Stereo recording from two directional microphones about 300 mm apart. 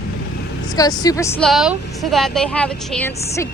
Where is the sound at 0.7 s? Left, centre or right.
Centre.